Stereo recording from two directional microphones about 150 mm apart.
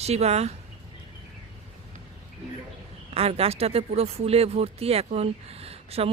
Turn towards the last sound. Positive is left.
turn(degrees=-40)  # may be behind; listen again after turning